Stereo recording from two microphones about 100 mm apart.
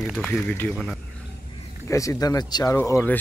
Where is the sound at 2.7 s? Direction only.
20° left (ahead or behind).